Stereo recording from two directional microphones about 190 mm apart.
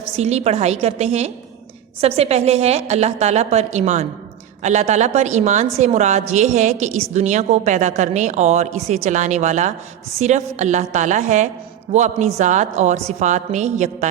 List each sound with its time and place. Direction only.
0.2 s a woman's voice: 35° right (ahead or behind)